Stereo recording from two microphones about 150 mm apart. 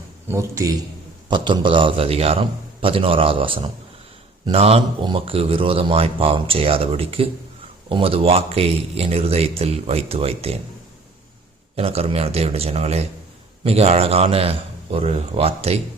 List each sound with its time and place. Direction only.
0.3 s a man's voice: 20° right (ahead or behind)
1.3 s speech: 30° right (ahead or behind)
11.8 s a man's voice: 40° right (ahead or behind)